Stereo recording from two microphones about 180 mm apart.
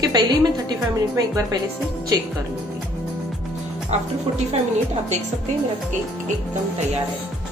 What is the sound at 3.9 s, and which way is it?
Speech, 35° right (ahead or behind).